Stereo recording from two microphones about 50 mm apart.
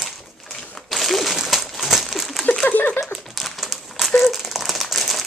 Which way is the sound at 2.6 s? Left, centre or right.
Left.